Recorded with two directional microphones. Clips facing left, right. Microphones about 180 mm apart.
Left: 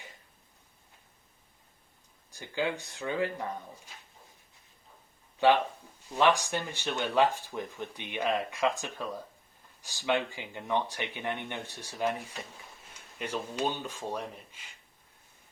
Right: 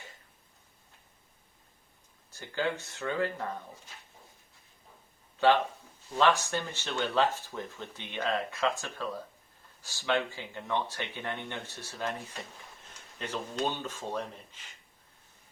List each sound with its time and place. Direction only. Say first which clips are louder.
2.3 s speech: even; 15° left (ahead or behind)
6.1 s speech: even; 15° left (ahead or behind)